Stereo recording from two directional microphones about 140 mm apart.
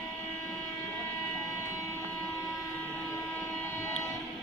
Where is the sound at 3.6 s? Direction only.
15° left (ahead or behind).